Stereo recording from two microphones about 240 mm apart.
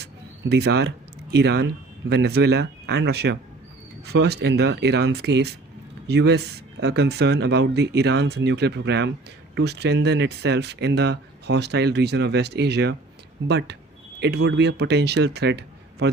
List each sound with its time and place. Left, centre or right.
0.0 s speech: right